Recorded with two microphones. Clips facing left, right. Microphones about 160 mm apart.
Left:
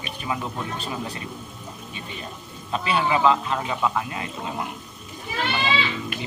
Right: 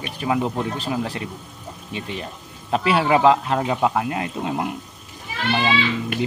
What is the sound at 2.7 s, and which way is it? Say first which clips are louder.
Speech: right 5 dB; 80° right.